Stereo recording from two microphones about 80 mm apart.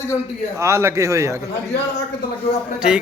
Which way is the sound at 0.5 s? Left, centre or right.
Right.